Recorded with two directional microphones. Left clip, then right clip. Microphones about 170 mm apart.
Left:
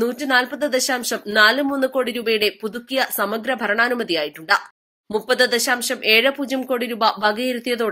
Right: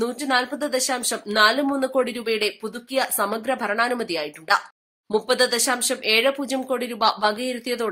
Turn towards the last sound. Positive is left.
turn(degrees=10)  # may be behind; listen again after turning